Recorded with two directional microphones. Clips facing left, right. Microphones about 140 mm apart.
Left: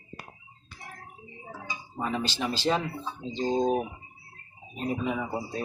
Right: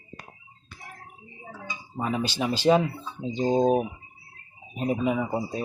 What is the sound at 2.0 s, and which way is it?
Speech, 10° right (ahead or behind).